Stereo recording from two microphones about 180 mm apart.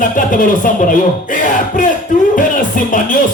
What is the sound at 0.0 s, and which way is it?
Speech, 50° left (ahead or behind).